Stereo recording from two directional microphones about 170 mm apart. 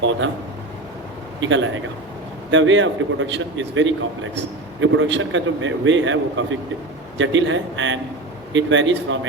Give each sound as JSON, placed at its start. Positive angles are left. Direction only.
{"t": 1.4, "sound": "a man's voice", "side_deg": -90}